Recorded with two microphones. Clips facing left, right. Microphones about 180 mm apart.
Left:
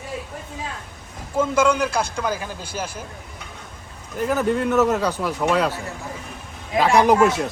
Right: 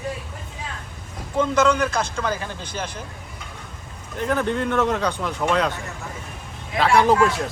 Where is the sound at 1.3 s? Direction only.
10° left (ahead or behind).